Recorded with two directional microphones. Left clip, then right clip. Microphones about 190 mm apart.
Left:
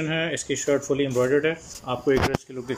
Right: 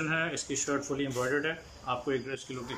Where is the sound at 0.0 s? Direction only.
10° left (ahead or behind).